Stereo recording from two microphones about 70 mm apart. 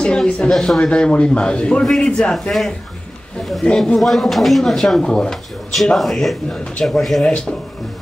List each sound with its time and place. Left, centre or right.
0.0 s speech: centre
3.6 s speech: centre